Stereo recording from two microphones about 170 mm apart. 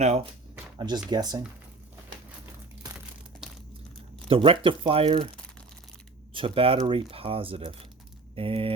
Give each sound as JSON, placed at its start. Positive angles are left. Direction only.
{"t": 0.0, "sound": "speech", "side_deg": -40}
{"t": 0.8, "sound": "speech", "side_deg": -25}
{"t": 4.3, "sound": "speech", "side_deg": -30}
{"t": 6.3, "sound": "speech", "side_deg": -30}